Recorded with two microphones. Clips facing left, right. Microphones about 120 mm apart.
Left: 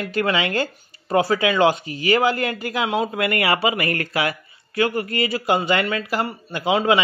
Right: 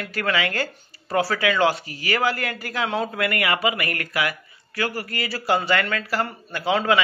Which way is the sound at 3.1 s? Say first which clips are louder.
Left 3 dB; 25° left (ahead or behind).